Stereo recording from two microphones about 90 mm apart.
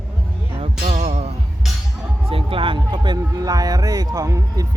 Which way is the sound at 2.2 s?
85° right.